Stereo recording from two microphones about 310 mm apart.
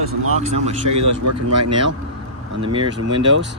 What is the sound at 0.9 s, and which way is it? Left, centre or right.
Speech, right.